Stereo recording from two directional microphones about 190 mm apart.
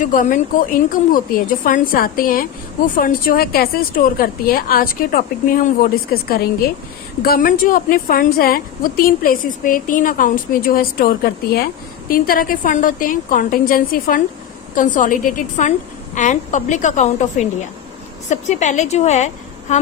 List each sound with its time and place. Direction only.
0.0 s a woman's voice: 45° left (ahead or behind)